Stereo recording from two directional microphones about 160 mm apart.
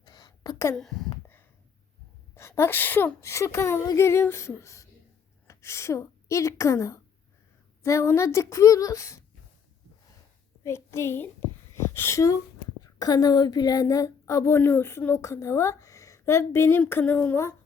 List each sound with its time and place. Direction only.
0.0 s a sound: 25° left (ahead or behind)
0.8 s speech: centre (ahead or behind)
2.3 s a woman's voice: 15° left (ahead or behind)
10.6 s a child's voice: 15° left (ahead or behind)